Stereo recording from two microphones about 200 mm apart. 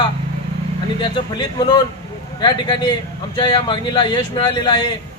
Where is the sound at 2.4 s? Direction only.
20° left (ahead or behind).